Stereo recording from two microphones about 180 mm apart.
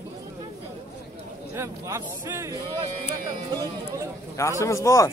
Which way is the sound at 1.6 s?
15° right (ahead or behind).